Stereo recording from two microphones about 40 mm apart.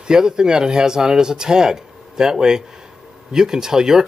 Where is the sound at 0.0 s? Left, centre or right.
Centre.